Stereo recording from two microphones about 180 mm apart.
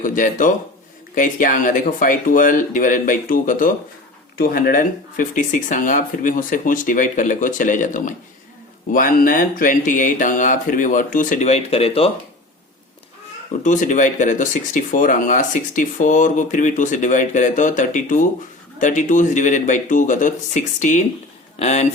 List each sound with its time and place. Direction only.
0.0 s speech: 45° left (ahead or behind)
13.6 s speech: 45° left (ahead or behind)